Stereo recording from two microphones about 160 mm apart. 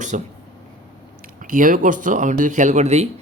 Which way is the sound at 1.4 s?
60° right (ahead or behind).